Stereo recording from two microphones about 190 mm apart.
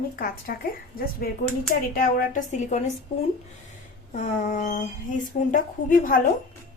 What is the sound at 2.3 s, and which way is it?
Speech, 40° left (ahead or behind).